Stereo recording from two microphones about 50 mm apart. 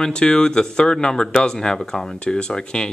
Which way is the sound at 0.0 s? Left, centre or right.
Centre.